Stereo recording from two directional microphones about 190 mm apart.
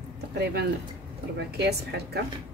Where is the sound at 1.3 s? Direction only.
60° right (ahead or behind).